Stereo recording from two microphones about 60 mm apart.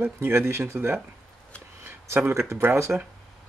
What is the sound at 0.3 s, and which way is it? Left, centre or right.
Speech, right.